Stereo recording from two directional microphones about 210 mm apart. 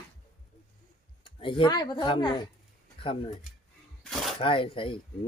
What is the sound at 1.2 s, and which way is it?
Speech, 25° left (ahead or behind).